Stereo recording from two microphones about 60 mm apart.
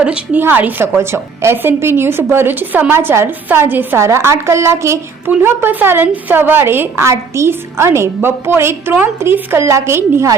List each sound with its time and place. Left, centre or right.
0.3 s a woman's voice: right
0.9 s a woman's voice: right
3.9 s a woman's voice: right
5.4 s a woman's voice: right